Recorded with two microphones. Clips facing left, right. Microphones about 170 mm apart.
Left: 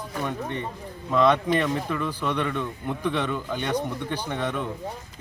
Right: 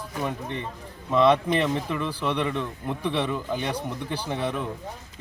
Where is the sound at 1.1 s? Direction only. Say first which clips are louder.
Right 1 dB; 10° right (ahead or behind).